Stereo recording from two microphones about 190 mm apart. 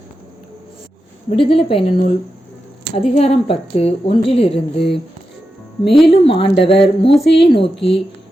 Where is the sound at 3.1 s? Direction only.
30° left (ahead or behind).